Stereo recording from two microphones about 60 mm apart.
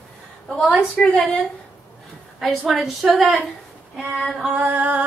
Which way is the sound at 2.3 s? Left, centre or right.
Centre.